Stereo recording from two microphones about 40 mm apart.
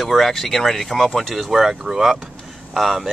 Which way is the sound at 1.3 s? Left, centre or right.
Centre.